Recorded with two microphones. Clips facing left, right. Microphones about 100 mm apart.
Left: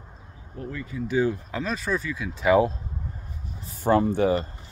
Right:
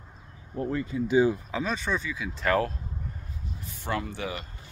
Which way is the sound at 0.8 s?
20° right (ahead or behind).